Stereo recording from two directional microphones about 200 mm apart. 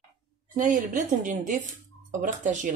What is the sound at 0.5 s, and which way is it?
Speech, 40° right (ahead or behind).